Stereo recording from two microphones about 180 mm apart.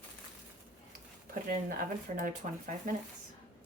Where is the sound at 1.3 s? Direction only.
50° right (ahead or behind).